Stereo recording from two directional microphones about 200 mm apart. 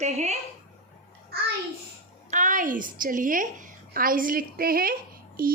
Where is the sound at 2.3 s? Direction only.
40° right (ahead or behind).